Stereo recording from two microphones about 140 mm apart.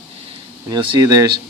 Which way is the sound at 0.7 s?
30° right (ahead or behind).